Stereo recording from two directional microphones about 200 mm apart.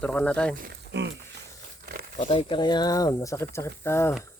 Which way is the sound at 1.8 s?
50° right (ahead or behind).